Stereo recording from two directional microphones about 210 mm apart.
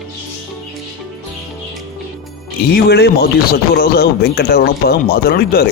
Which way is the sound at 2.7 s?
50° left (ahead or behind).